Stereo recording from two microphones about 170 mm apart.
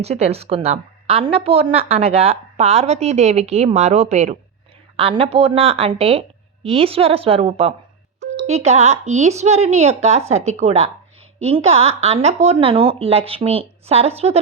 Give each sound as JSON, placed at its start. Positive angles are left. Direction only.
{"t": 0.0, "sound": "speech", "side_deg": -40}